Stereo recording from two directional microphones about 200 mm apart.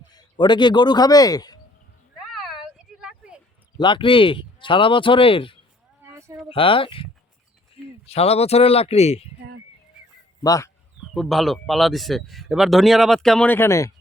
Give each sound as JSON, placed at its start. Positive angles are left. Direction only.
{"t": 0.1, "sound": "speech", "side_deg": 20}
{"t": 2.1, "sound": "a sound", "side_deg": 0}
{"t": 3.8, "sound": "speech", "side_deg": 25}
{"t": 6.1, "sound": "a sound", "side_deg": -15}
{"t": 6.5, "sound": "speech", "side_deg": 25}
{"t": 10.4, "sound": "speech", "side_deg": 15}
{"t": 11.1, "sound": "speech", "side_deg": 0}